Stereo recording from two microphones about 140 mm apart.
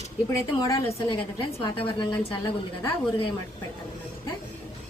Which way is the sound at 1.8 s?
40° left (ahead or behind).